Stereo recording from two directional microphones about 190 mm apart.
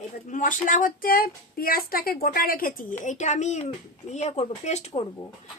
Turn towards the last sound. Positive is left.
turn(degrees=30)  # may be behind; listen again after turning